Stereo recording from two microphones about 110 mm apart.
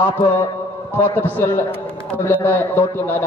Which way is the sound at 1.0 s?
20° left (ahead or behind).